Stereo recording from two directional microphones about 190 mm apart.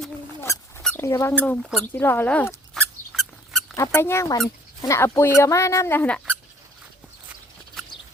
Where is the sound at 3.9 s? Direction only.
15° left (ahead or behind).